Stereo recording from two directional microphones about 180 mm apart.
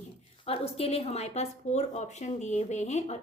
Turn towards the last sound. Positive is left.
turn(degrees=40)  # may be behind; listen again after turning